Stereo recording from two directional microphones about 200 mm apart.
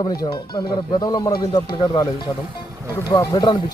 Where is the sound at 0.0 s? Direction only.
20° left (ahead or behind).